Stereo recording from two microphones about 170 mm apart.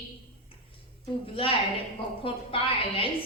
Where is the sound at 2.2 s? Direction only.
35° left (ahead or behind).